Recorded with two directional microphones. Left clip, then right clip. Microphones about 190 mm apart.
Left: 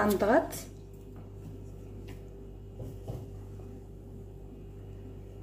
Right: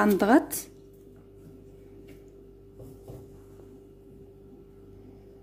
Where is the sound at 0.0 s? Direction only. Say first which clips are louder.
Right 4 dB; 60° right (ahead or behind).